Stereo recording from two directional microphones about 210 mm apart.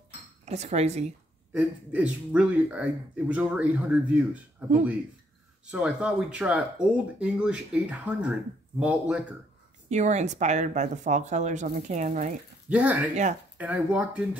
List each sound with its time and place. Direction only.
0.5 s speech: 30° right (ahead or behind)
1.5 s speech: 5° right (ahead or behind)
5.7 s speech: 5° right (ahead or behind)
9.8 s speech: 35° right (ahead or behind)
12.6 s speech: 5° right (ahead or behind)
13.1 s speech: 35° right (ahead or behind)
13.6 s speech: 5° right (ahead or behind)